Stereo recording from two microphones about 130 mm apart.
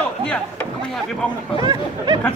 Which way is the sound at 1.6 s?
30° right (ahead or behind).